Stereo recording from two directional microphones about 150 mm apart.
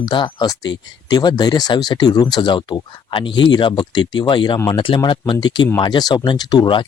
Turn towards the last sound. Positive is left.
turn(degrees=30)  # may be behind; listen again after turning